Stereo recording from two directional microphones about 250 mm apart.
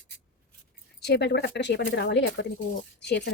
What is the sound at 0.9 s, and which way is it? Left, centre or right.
Speech, left.